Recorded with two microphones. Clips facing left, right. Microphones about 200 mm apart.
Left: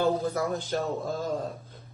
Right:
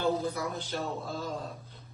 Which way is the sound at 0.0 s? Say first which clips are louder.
Left 4 dB; 45° left (ahead or behind).